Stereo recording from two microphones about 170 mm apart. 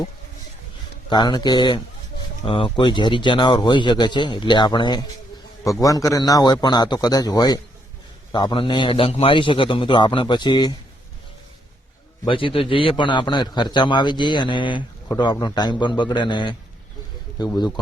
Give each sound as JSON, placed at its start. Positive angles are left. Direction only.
{"t": 1.1, "sound": "a man's voice", "side_deg": 25}
{"t": 12.2, "sound": "a man's voice", "side_deg": 30}